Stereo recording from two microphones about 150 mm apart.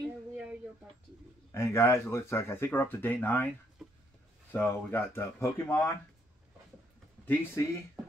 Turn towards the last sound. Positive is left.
turn(degrees=10)  # may be behind; listen again after turning